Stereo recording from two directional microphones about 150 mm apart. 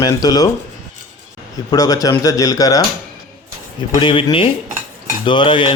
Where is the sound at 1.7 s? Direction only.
25° left (ahead or behind).